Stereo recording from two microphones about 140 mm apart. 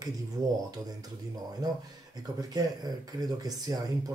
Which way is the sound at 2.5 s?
30° right (ahead or behind).